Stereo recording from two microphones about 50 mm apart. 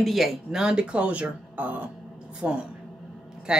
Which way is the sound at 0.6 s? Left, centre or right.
Centre.